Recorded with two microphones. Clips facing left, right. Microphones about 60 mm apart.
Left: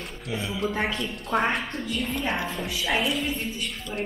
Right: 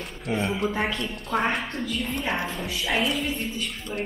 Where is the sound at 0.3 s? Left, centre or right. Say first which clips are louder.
Right 5 dB; right.